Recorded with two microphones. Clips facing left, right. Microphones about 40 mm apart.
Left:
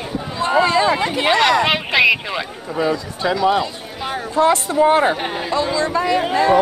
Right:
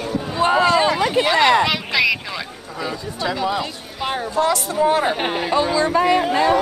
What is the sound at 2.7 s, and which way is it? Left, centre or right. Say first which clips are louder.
Speech: left 6 dB; left.